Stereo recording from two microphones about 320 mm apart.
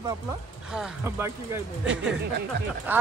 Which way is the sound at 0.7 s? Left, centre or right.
Centre.